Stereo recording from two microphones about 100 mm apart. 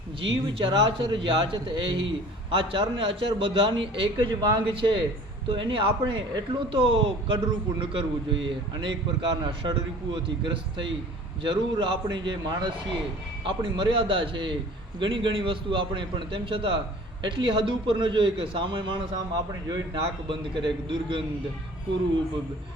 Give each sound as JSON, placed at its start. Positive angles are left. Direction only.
{"t": 0.2, "sound": "a man's voice", "side_deg": -60}